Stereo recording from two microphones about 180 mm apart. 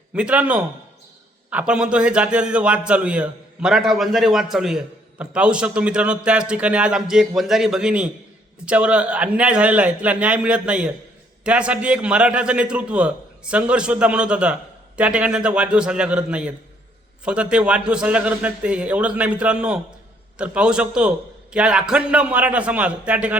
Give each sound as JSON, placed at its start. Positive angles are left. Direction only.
{"t": 0.1, "sound": "a man's voice", "side_deg": -5}